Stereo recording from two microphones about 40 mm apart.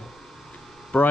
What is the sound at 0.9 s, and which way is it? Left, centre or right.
Speech, left.